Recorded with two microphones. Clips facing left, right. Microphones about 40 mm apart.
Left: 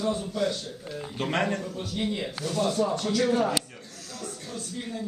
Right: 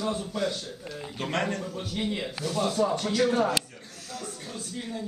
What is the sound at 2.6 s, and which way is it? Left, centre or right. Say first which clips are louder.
Speech: even; centre.